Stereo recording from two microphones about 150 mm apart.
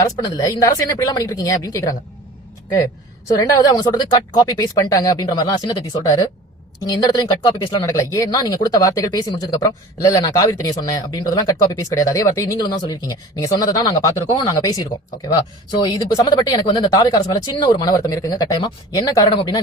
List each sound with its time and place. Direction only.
0.0 s speech: 25° left (ahead or behind)
3.2 s speech: 20° left (ahead or behind)